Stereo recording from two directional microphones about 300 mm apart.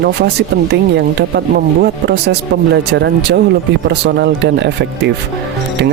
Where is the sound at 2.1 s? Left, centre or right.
Right.